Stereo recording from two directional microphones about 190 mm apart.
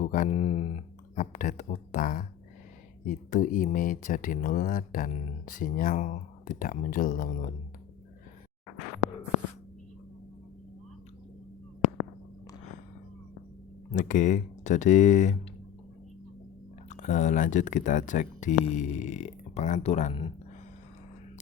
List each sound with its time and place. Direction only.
0.0 s speech: 45° left (ahead or behind)
13.9 s speech: 40° left (ahead or behind)
16.9 s speech: 40° left (ahead or behind)